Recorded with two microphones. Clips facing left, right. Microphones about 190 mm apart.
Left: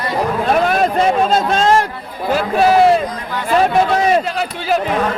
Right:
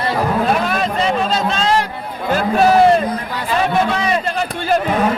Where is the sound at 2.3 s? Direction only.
5° left (ahead or behind).